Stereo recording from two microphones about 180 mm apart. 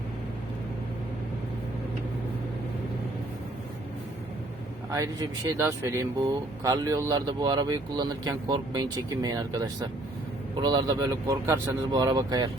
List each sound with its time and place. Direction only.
4.9 s speech: 20° right (ahead or behind)